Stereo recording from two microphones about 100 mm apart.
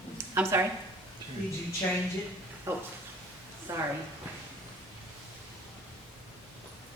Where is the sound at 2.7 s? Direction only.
25° right (ahead or behind).